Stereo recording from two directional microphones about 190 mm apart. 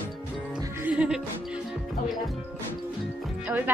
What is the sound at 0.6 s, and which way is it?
Music, 10° right (ahead or behind).